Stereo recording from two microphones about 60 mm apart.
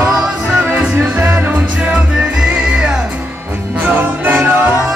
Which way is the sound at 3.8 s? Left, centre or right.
Right.